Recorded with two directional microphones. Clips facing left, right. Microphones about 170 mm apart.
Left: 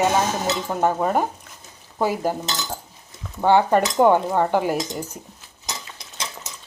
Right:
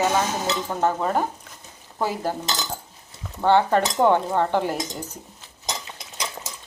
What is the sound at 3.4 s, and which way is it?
Cutlery, 10° left (ahead or behind).